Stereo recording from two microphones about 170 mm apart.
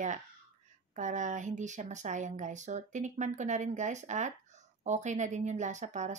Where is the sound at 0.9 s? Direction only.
45° right (ahead or behind).